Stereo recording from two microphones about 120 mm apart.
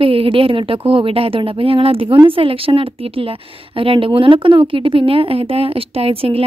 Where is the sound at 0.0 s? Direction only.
50° right (ahead or behind).